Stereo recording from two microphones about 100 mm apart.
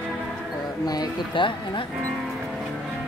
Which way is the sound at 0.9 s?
50° left (ahead or behind).